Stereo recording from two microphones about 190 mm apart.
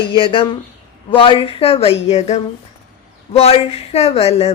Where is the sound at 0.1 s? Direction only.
25° left (ahead or behind).